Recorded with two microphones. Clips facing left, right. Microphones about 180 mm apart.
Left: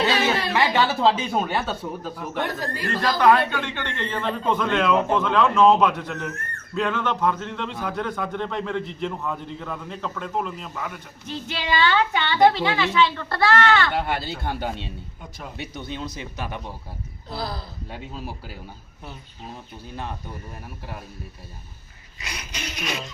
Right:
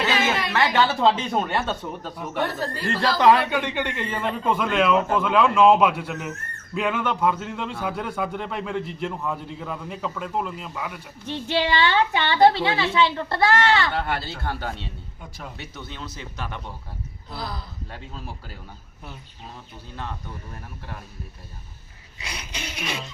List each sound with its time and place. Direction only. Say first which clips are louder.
0.5 s a man's voice: right 2 dB; 10° left (ahead or behind)
3.2 s a man's voice: even; 20° right (ahead or behind); by 11.0 s 5° right (ahead or behind)
11.3 s speech: right 4 dB; 30° right (ahead or behind)
13.9 s speech: left 1 dB; 15° left (ahead or behind)
17.2 s speech: left 3 dB; 35° left (ahead or behind)
17.9 s speech: left 4 dB; 10° left (ahead or behind)
22.7 s speech: left 1 dB; 10° right (ahead or behind)